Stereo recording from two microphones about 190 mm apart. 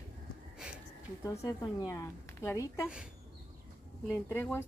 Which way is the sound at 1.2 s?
15° left (ahead or behind).